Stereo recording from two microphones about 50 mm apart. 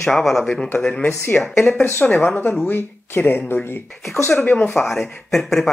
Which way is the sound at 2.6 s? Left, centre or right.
Left.